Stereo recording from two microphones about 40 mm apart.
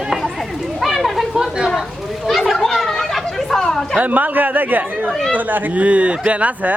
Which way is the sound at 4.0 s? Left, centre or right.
Right.